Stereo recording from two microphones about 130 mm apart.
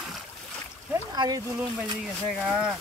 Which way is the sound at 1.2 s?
30° right (ahead or behind).